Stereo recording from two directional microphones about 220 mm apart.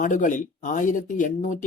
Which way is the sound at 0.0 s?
35° left (ahead or behind).